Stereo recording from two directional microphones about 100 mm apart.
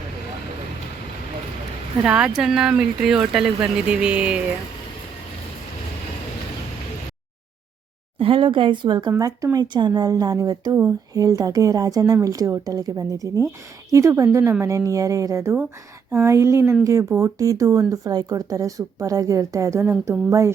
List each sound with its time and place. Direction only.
2.0 s speech: 10° right (ahead or behind)
8.2 s speech: 60° right (ahead or behind); by 20.5 s 30° right (ahead or behind)